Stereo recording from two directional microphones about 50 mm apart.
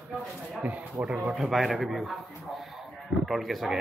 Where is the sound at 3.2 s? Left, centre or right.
Centre.